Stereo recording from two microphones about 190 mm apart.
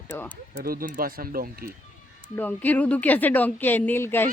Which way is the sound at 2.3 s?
10° left (ahead or behind).